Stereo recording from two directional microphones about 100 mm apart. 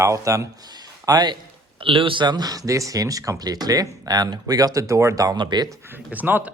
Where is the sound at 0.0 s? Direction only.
30° right (ahead or behind).